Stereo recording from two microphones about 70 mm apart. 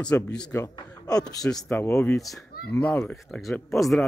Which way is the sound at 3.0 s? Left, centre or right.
Centre.